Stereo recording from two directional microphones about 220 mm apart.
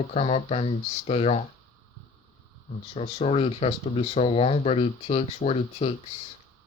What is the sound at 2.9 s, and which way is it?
Speech, 30° left (ahead or behind).